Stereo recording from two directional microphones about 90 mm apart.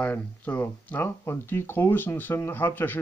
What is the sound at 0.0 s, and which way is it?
Speech, 20° left (ahead or behind).